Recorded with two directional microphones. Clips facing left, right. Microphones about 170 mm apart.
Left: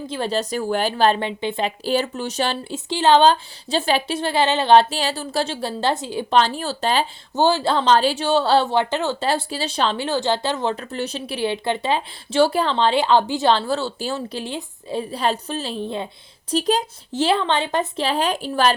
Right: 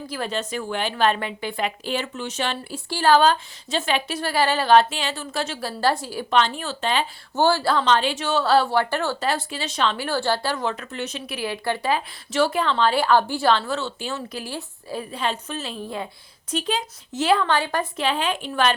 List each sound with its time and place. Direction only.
0.1 s speech: 30° left (ahead or behind)
6.3 s speech: 35° left (ahead or behind)
7.3 s speech: 20° left (ahead or behind)
9.2 s speech: 30° left (ahead or behind)
10.1 s speech: 20° left (ahead or behind)
13.5 s speech: 30° left (ahead or behind)
15.1 s speech: 35° left (ahead or behind)